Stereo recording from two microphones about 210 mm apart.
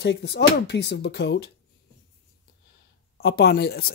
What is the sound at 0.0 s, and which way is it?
Speech, 55° left (ahead or behind).